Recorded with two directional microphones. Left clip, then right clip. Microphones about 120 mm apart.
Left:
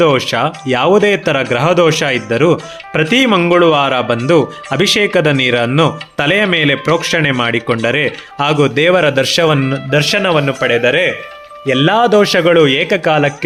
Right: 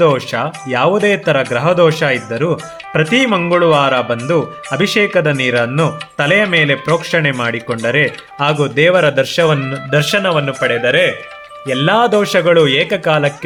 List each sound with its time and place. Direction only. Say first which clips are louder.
0.0 s speech: left 2 dB; 50° left (ahead or behind)